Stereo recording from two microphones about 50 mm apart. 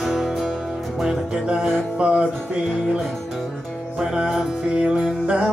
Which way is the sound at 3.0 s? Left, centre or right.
Centre.